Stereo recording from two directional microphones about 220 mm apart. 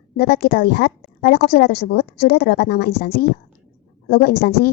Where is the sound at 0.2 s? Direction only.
45° left (ahead or behind).